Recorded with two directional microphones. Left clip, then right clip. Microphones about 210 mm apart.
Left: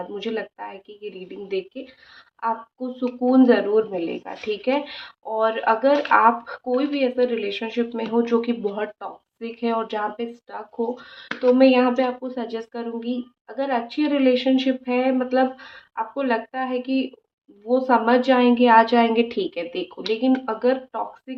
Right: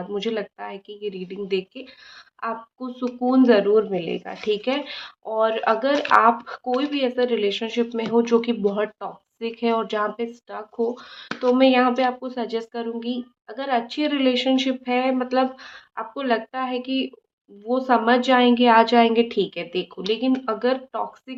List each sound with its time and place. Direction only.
0.2 s speech: 35° right (ahead or behind)